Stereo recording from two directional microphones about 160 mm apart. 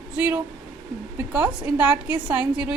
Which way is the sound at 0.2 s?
10° right (ahead or behind).